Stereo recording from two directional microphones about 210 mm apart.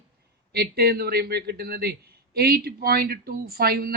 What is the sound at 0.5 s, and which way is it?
A man's voice, 50° right (ahead or behind).